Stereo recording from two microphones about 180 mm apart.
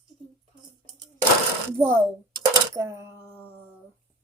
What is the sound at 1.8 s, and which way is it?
Speech, 10° right (ahead or behind).